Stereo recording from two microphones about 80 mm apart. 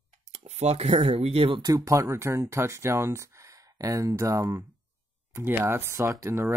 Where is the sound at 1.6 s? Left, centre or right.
Right.